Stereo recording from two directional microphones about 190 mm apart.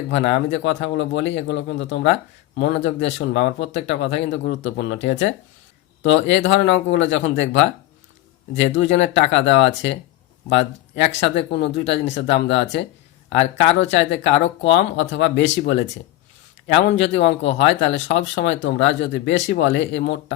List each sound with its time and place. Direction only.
0.1 s speech: 65° left (ahead or behind)
6.9 s speech: 75° left (ahead or behind)
8.5 s speech: 70° left (ahead or behind)
16.9 s speech: 70° left (ahead or behind)